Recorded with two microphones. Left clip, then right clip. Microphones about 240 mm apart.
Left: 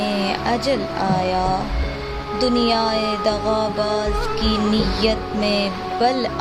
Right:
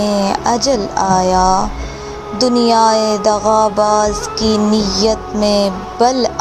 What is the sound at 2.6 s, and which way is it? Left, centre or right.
Music, right.